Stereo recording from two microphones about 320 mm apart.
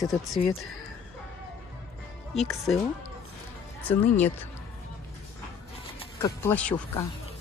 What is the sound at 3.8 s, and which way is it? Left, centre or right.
Speech, centre.